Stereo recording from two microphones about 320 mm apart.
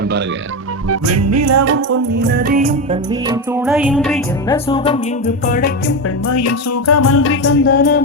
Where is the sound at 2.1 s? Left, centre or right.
Right; by 4.6 s centre.